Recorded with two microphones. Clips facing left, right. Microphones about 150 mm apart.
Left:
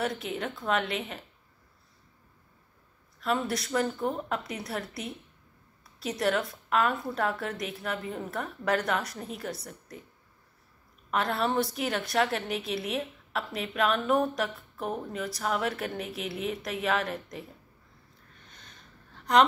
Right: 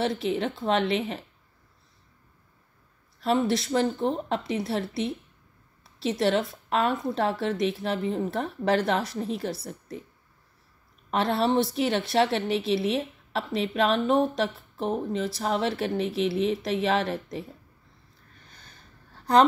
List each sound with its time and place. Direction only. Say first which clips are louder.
0.0 s a woman's voice: right 5 dB; 30° right (ahead or behind)
3.2 s a woman's voice: right 5 dB; 30° right (ahead or behind)
11.1 s a woman's voice: right 4 dB; 30° right (ahead or behind)
18.5 s a sound: even; 35° right (ahead or behind)